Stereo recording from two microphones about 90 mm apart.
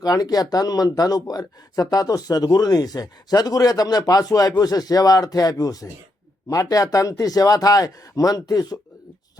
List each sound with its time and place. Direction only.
0.0 s speech: 45° left (ahead or behind)